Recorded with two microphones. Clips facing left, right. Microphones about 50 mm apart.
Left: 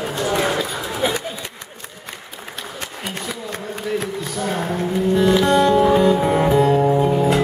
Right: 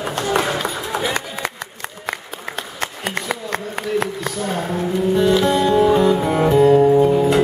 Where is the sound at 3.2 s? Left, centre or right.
Right.